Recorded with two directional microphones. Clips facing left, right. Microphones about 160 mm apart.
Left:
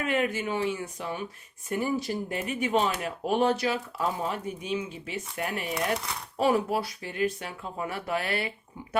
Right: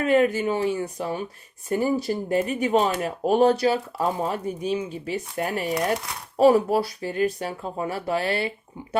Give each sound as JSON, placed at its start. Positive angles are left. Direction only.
{"t": 0.0, "sound": "speech", "side_deg": -35}